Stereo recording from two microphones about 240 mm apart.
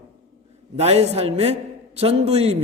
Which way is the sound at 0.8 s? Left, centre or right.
Right.